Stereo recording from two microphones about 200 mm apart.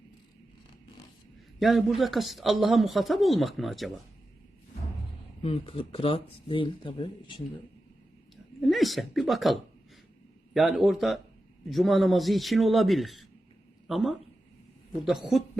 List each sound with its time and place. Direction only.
1.5 s a man's voice: centre (ahead or behind)
5.4 s speech: 30° left (ahead or behind)
8.6 s a man's voice: centre (ahead or behind)